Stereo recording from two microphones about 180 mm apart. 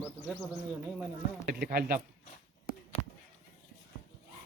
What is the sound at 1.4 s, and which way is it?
Speech, 60° right (ahead or behind).